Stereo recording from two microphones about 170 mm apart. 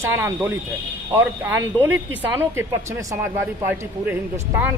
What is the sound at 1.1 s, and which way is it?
Speech, 10° right (ahead or behind).